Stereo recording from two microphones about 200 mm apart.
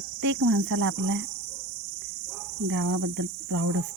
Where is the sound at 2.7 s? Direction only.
90° right.